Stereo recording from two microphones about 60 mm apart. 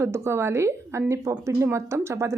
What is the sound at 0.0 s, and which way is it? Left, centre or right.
A woman's voice, right.